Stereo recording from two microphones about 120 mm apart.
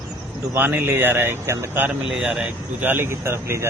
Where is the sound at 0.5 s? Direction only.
15° right (ahead or behind).